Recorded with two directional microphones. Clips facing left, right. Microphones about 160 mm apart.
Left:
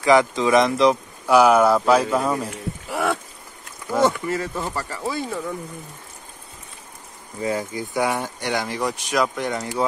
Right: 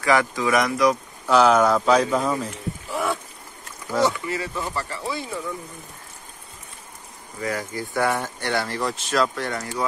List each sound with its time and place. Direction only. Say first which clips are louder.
0.0 s speech: left 4 dB; 20° left (ahead or behind)
1.2 s speech: left 2 dB; 10° left (ahead or behind)
2.9 s livestock: left 2 dB; 70° left (ahead or behind)
4.0 s speech: left 2 dB; 50° left (ahead or behind)
7.4 s speech: left 3 dB; 20° left (ahead or behind)